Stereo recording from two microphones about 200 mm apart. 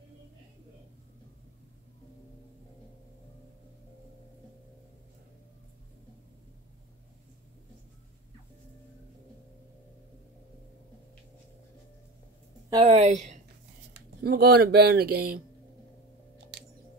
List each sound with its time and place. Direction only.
12.6 s a woman's voice: 25° right (ahead or behind)
13.9 s speech: 50° right (ahead or behind)